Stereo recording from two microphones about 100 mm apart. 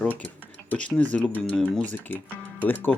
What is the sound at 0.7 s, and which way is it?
Speech, 15° left (ahead or behind).